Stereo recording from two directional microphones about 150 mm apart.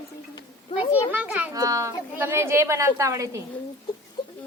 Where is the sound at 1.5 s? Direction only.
20° right (ahead or behind).